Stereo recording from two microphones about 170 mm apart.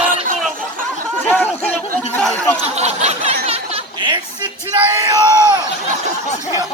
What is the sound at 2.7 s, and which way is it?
Snicker, 40° right (ahead or behind).